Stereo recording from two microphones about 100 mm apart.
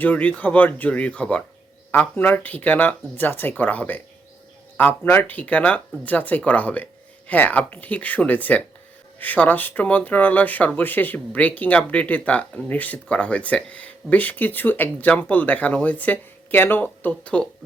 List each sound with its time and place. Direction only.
0.0 s speech: 15° left (ahead or behind)